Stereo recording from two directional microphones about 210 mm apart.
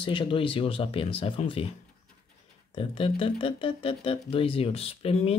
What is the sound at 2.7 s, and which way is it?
Speech, 25° left (ahead or behind).